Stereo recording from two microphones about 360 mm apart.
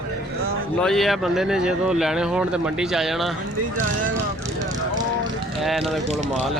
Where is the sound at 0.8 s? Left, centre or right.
Centre.